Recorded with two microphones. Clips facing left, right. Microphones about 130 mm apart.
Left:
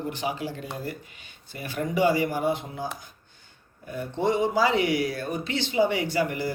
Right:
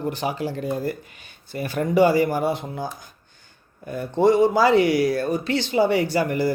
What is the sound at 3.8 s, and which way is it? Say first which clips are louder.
A man's voice: right 7 dB; 40° right (ahead or behind).